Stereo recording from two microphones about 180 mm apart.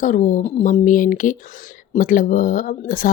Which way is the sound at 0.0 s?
45° left (ahead or behind).